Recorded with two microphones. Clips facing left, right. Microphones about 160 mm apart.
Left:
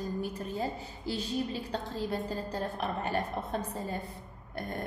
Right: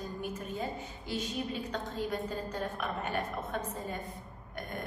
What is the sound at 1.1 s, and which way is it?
A woman's voice, 35° left (ahead or behind).